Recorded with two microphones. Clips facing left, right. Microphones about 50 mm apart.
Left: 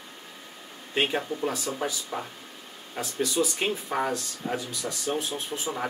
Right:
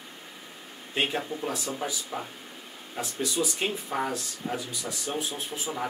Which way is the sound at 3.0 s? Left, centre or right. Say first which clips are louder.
Left 3 dB; centre.